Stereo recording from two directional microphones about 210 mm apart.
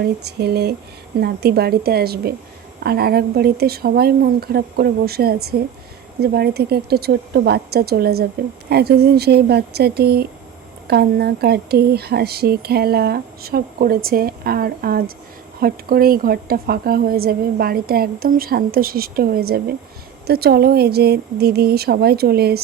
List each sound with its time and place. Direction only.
0.0 s speech: 50° right (ahead or behind)